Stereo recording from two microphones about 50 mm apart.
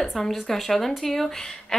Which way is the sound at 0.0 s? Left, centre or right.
Centre.